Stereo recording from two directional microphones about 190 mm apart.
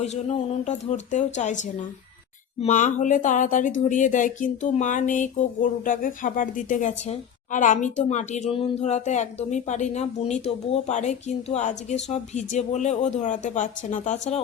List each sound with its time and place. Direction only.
0.0 s speech: 35° left (ahead or behind)